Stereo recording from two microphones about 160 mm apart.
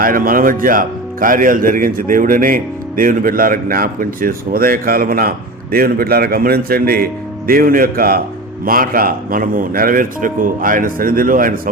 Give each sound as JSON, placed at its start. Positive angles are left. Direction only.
{"t": 0.0, "sound": "speech", "side_deg": -60}